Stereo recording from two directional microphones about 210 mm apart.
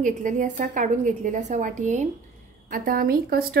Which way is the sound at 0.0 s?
40° right (ahead or behind).